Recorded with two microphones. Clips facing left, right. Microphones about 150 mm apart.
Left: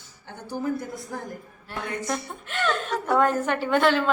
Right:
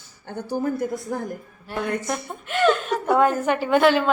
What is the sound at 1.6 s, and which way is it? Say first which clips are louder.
A woman's voice: right 4 dB; 10° right (ahead or behind).